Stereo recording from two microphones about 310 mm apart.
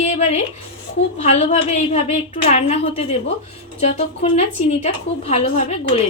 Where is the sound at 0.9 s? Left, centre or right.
Left.